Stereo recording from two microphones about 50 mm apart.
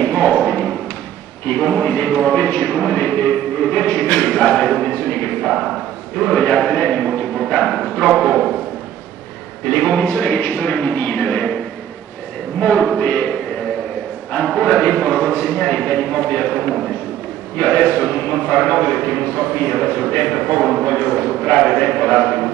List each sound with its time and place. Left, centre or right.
0.0 s a sound: left
1.5 s a man's voice: left
7.1 s speech: centre
9.7 s a man's voice: left
12.5 s a man's voice: left
13.0 s music: left
14.3 s a sound: centre
17.6 s a man's voice: left